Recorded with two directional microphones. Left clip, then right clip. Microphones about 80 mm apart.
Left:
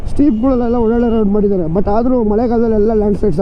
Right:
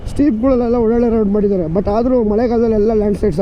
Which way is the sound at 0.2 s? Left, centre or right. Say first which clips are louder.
Even; right.